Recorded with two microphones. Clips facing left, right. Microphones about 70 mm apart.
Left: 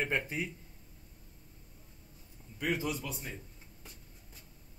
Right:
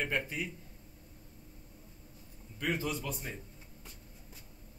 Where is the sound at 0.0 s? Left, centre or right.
Left.